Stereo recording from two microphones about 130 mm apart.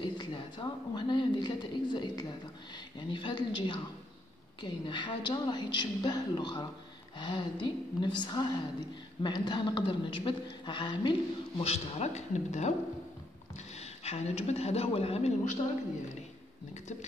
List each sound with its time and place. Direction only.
0.0 s a woman's voice: 40° left (ahead or behind)
11.6 s a woman's voice: 55° left (ahead or behind)
13.7 s a man's voice: 55° left (ahead or behind)